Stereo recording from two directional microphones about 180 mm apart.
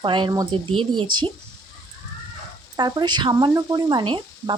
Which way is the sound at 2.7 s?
25° right (ahead or behind).